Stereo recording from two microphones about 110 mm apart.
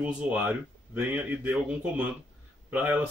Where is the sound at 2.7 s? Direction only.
25° right (ahead or behind).